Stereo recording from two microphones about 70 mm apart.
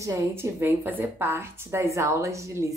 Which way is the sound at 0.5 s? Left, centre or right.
Right.